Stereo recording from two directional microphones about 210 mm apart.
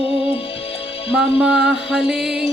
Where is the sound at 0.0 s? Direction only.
25° left (ahead or behind).